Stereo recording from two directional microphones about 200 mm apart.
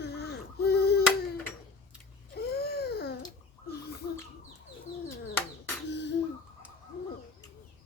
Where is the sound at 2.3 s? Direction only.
50° left (ahead or behind).